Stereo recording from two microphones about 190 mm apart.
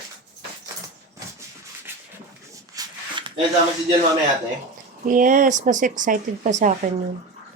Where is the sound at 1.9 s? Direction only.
10° right (ahead or behind).